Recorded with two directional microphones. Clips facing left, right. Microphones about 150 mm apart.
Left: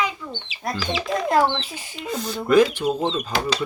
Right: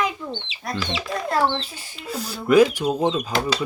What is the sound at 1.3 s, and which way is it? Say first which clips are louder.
Speech: left 2 dB; 15° left (ahead or behind).